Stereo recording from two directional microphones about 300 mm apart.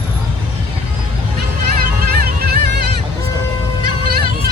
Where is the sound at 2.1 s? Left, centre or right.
Right.